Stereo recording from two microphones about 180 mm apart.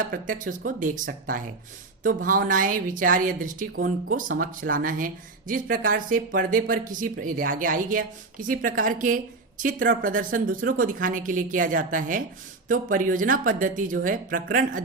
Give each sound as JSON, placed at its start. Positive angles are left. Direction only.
{"t": 0.0, "sound": "speech", "side_deg": -50}